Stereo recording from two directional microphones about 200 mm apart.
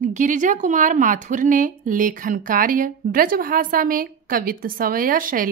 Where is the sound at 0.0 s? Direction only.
40° right (ahead or behind).